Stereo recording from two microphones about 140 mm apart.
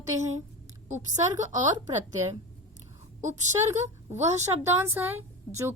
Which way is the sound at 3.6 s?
20° right (ahead or behind).